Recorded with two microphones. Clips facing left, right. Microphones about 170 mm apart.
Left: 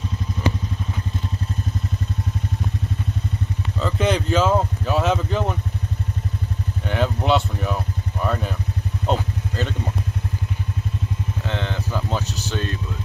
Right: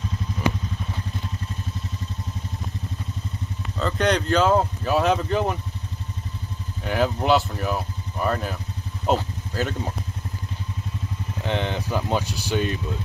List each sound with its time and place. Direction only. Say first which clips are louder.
3.8 s speech: even; 5° left (ahead or behind)
6.9 s speech: even; centre (ahead or behind)
9.0 s vehicle: right 1 dB; 5° right (ahead or behind)
11.4 s a sound: right 4 dB; 15° right (ahead or behind)